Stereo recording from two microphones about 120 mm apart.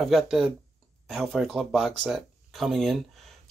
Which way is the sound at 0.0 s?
Centre (ahead or behind).